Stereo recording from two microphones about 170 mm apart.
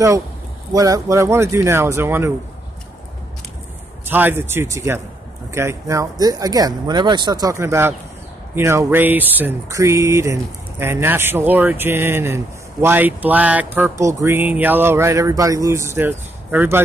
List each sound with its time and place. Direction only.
0.7 s speech: 20° right (ahead or behind)
4.0 s speech: 10° right (ahead or behind)